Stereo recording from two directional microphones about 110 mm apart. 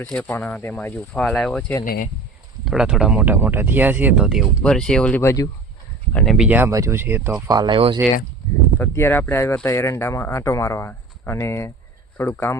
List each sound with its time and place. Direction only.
0.0 s speech: 10° left (ahead or behind)
2.6 s speech: 5° right (ahead or behind)
3.3 s speech: 20° right (ahead or behind)
4.6 s speech: 5° left (ahead or behind)
5.2 s speech: 25° left (ahead or behind)
6.1 s speech: centre (ahead or behind)
6.5 s speech: 25° right (ahead or behind)
7.4 s speech: 40° right (ahead or behind)
8.0 s speech: 10° right (ahead or behind)
8.8 s speech: 20° left (ahead or behind)